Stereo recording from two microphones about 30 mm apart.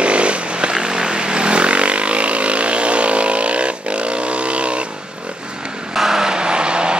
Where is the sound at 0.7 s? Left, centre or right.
Right.